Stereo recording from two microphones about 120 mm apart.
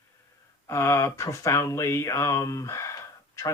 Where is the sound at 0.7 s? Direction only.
25° left (ahead or behind).